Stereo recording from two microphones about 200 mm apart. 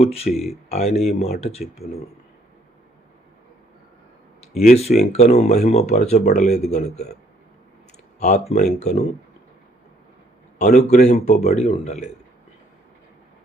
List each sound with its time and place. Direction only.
0.0 s speech: 30° left (ahead or behind)
0.3 s speech: centre (ahead or behind)
0.7 s speech: 35° left (ahead or behind)
4.7 s speech: 35° left (ahead or behind)
8.2 s speech: 35° left (ahead or behind)
10.6 s speech: 35° left (ahead or behind)